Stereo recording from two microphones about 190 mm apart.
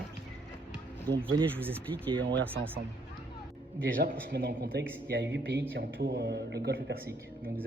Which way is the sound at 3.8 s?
55° right (ahead or behind).